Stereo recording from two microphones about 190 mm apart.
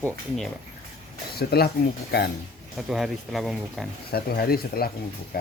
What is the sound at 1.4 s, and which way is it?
Speech, 55° left (ahead or behind).